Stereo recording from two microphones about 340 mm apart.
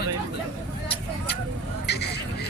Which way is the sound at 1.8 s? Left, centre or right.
Left.